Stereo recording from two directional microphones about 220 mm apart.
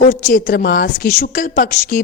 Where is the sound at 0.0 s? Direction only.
40° left (ahead or behind).